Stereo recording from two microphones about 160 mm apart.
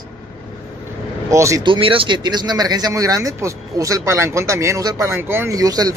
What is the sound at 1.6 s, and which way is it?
Speech, 30° right (ahead or behind).